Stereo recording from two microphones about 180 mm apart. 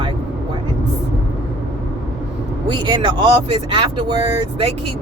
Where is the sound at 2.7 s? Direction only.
25° right (ahead or behind).